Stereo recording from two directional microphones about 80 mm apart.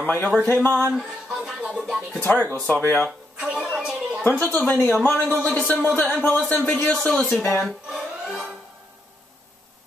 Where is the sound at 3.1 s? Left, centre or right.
Centre.